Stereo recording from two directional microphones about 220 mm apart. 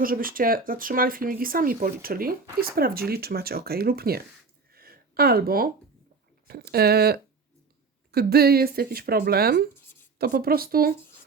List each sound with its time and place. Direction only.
0.0 s speech: 40° right (ahead or behind)
4.7 s a sound: 45° right (ahead or behind)
6.5 s speech: 45° right (ahead or behind)